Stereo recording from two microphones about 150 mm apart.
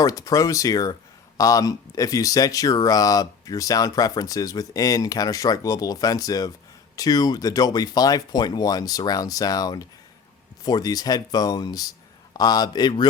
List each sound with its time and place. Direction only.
0.0 s speech: 25° left (ahead or behind)